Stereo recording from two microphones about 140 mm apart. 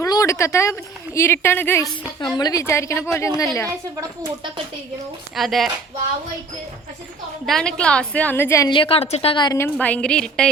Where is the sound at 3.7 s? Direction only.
25° right (ahead or behind).